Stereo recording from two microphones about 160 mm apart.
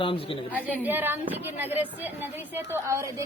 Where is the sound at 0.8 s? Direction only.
10° right (ahead or behind).